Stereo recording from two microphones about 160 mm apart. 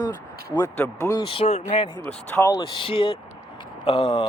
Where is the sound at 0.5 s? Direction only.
20° left (ahead or behind).